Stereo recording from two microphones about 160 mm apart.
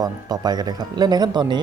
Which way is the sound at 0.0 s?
25° right (ahead or behind).